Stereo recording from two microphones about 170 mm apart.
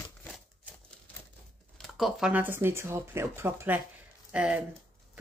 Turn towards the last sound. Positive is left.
turn(degrees=-5)  # may be behind; listen again after turning